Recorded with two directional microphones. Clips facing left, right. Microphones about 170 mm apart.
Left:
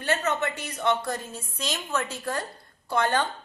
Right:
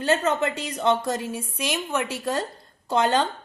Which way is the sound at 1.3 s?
10° right (ahead or behind).